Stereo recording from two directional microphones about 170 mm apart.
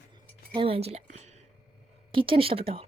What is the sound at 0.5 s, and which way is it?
Speech, 35° right (ahead or behind).